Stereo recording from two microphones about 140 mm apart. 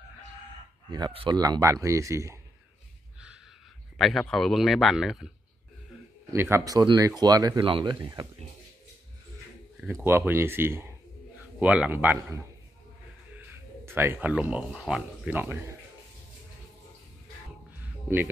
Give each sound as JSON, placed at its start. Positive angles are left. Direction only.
{"t": 0.8, "sound": "speech", "side_deg": -30}
{"t": 1.4, "sound": "speech", "side_deg": -25}
{"t": 4.0, "sound": "a man's voice", "side_deg": 0}
{"t": 6.3, "sound": "speech", "side_deg": -20}
{"t": 10.0, "sound": "speech", "side_deg": -15}
{"t": 15.3, "sound": "speech", "side_deg": -15}